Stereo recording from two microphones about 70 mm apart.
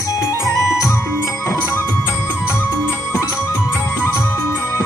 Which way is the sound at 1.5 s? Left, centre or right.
Left.